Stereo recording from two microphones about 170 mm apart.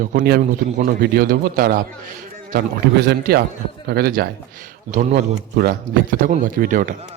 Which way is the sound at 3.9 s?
65° right (ahead or behind).